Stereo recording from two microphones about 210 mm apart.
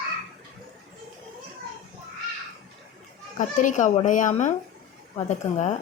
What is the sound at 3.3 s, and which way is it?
A child's voice, 35° left (ahead or behind).